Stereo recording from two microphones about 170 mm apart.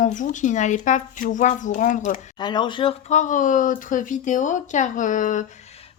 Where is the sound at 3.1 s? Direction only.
45° left (ahead or behind).